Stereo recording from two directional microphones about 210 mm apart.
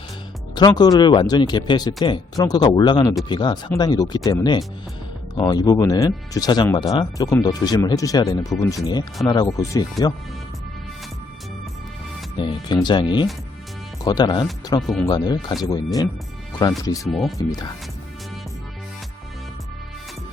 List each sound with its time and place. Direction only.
0.5 s speech: 20° left (ahead or behind)
12.4 s speech: 20° left (ahead or behind)
14.8 s speech: centre (ahead or behind)
15.0 s speech: 20° left (ahead or behind)
17.1 s speech: centre (ahead or behind)
17.3 s speech: 15° left (ahead or behind)